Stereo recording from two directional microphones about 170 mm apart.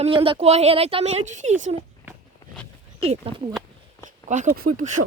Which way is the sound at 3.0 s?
35° right (ahead or behind).